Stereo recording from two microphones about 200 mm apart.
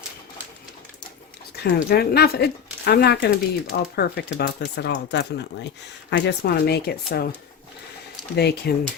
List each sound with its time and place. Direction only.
1.6 s speech: 55° left (ahead or behind)
8.4 s speech: 55° left (ahead or behind)